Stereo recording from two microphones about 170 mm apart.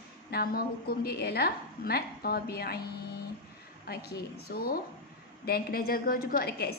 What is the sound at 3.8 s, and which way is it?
A woman's voice, 65° left (ahead or behind).